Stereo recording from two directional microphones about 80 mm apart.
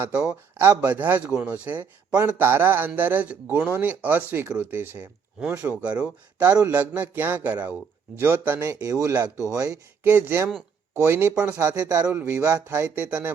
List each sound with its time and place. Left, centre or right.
0.0 s a man's voice: centre
8.1 s a man's voice: right
8.6 s a man's voice: right
10.0 s a man's voice: right
11.6 s a man's voice: right
12.0 s speech: right
13.1 s a man's voice: centre